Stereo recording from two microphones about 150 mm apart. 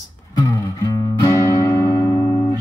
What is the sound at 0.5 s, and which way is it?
Music, 20° left (ahead or behind).